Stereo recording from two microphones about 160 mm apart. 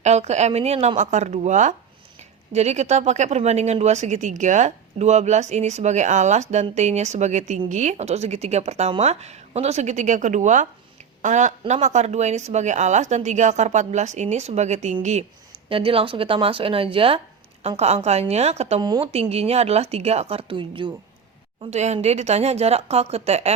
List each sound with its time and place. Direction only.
0.0 s speech: 45° right (ahead or behind)
15.7 s a woman's voice: 35° right (ahead or behind)
18.8 s speech: 25° right (ahead or behind)
19.3 s a woman's voice: 40° right (ahead or behind)
21.6 s speech: 45° right (ahead or behind)